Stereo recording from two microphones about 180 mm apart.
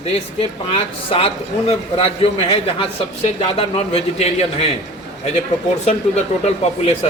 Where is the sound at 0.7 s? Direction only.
30° left (ahead or behind).